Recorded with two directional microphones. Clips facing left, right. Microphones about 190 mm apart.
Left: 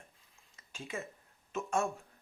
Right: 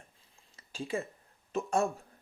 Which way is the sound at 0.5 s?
35° right (ahead or behind).